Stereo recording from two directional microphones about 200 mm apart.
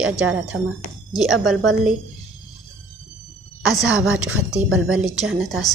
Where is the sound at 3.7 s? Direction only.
Centre (ahead or behind).